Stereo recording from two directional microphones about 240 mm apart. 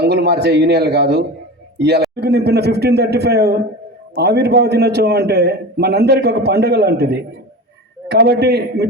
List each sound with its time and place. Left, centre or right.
0.0 s a man's voice: right